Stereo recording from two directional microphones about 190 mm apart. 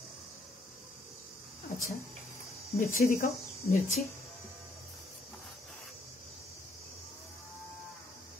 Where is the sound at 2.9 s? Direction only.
45° left (ahead or behind).